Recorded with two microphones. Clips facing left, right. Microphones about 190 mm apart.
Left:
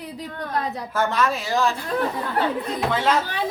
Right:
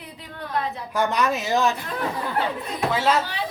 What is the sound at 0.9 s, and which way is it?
Speech, 15° right (ahead or behind).